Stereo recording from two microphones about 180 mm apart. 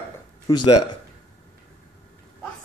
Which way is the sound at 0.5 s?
20° left (ahead or behind).